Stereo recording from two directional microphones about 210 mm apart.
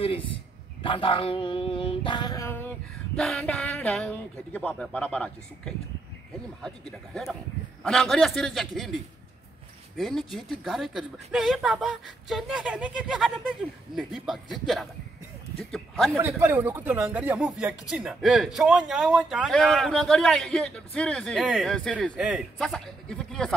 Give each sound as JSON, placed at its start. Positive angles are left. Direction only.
{"t": 0.8, "sound": "a sound", "side_deg": 25}
{"t": 3.2, "sound": "speech", "side_deg": 0}
{"t": 9.9, "sound": "speech", "side_deg": 0}
{"t": 16.2, "sound": "speech", "side_deg": -10}